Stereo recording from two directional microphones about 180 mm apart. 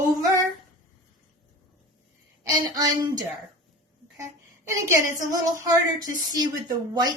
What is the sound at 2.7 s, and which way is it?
Speech, 20° right (ahead or behind).